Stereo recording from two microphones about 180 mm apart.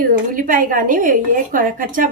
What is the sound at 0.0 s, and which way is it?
Speech, 50° right (ahead or behind).